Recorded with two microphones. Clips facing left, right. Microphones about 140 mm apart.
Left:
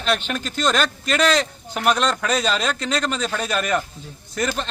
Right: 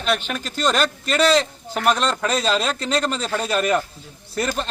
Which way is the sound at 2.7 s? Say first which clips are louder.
Right 1 dB; 30° right (ahead or behind).